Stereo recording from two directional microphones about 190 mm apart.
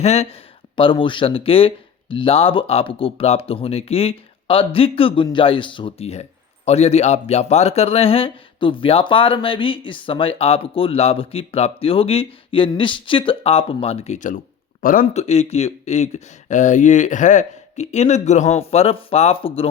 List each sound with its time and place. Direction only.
0.0 s speech: 35° left (ahead or behind)